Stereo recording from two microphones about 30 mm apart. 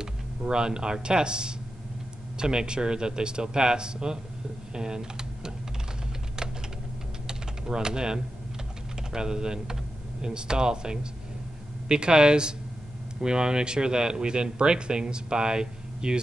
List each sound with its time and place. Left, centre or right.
0.4 s speech: right
7.2 s typing: right
9.1 s speech: right